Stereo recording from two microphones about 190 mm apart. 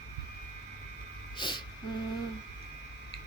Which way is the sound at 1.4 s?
25° left (ahead or behind).